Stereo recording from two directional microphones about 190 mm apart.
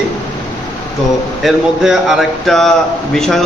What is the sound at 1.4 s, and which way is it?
A man's voice, centre (ahead or behind).